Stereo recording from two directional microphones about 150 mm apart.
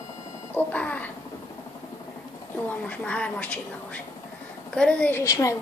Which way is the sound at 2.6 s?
10° left (ahead or behind).